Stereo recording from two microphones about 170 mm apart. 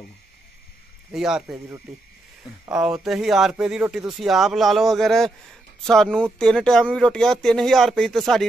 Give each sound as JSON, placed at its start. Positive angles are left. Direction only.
{"t": 1.1, "sound": "speech", "side_deg": -5}
{"t": 3.0, "sound": "speech", "side_deg": 0}